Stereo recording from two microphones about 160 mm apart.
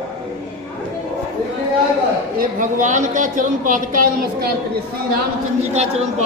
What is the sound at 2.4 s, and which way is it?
Speech, 55° right (ahead or behind).